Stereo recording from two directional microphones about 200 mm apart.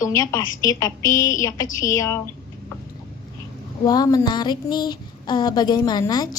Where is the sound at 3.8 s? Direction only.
20° left (ahead or behind).